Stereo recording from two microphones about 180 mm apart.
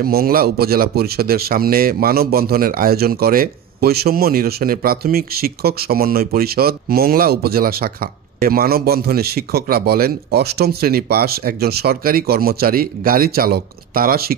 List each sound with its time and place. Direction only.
0.0 s speech: 55° right (ahead or behind)